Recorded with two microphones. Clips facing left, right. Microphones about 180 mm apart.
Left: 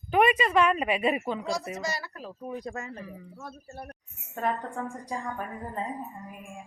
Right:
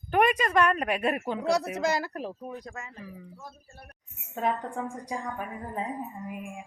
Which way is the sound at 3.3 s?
70° left (ahead or behind).